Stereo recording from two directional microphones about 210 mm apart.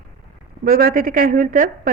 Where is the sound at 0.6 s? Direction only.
45° right (ahead or behind).